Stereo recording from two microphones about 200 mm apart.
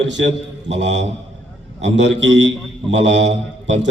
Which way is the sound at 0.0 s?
65° right (ahead or behind).